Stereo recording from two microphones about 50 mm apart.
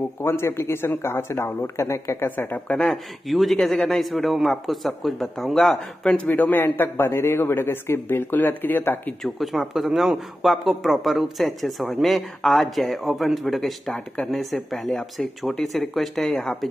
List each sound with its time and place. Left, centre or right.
0.2 s speech: left
2.1 s speech: left
3.3 s a man's voice: centre
6.2 s speech: left
6.6 s speech: left
9.2 s a man's voice: centre
14.3 s a man's voice: centre